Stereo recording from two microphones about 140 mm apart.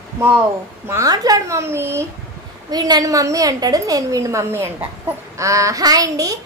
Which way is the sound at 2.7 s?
30° right (ahead or behind).